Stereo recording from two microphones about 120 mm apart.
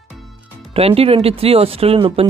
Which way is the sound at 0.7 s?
55° right (ahead or behind).